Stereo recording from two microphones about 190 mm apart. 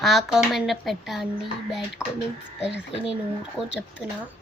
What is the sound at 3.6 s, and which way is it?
Speech, centre (ahead or behind).